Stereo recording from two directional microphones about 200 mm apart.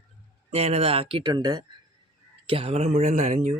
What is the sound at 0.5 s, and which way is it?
Speech, 30° right (ahead or behind).